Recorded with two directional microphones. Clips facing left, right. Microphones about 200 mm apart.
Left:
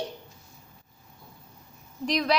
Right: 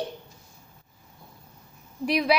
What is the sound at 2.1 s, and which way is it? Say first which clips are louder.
Speech: right 3 dB; 10° right (ahead or behind).